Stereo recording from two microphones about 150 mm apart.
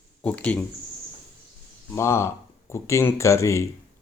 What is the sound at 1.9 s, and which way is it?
Speech, 20° left (ahead or behind).